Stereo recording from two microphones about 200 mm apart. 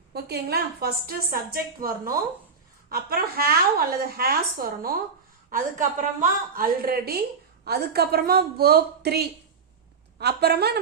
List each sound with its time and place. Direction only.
0.1 s a woman's voice: 50° right (ahead or behind)